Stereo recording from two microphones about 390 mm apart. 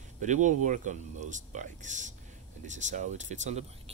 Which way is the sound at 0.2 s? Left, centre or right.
Centre.